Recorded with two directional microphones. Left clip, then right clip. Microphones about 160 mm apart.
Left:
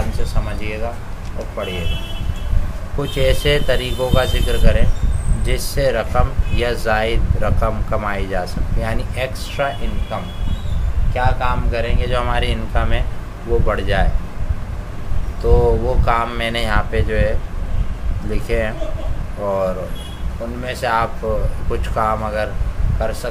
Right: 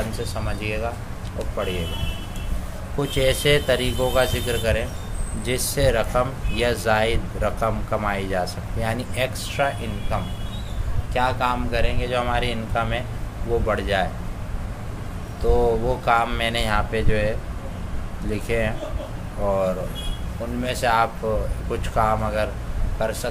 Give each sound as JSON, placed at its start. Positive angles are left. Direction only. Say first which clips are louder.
{"t": 0.2, "sound": "speech", "louder": "left 1 dB", "side_deg": -20}
{"t": 3.0, "sound": "speech", "louder": "left 3 dB", "side_deg": -5}
{"t": 11.1, "sound": "speech", "louder": "left 2 dB", "side_deg": -20}
{"t": 11.7, "sound": "speech", "louder": "left 3 dB", "side_deg": 0}
{"t": 15.4, "sound": "speech", "louder": "left 4 dB", "side_deg": 0}